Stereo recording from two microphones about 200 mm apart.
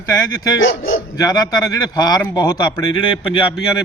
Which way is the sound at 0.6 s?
70° left (ahead or behind).